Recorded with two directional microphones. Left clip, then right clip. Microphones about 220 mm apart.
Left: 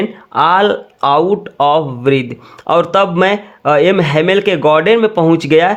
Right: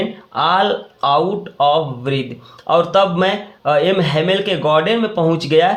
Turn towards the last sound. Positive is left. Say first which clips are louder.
# left 4 dB
turn(degrees=45)  # may be behind; listen again after turning